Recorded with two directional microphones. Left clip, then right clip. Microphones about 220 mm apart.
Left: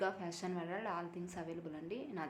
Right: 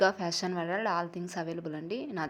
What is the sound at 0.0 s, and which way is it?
A woman's voice, 35° right (ahead or behind).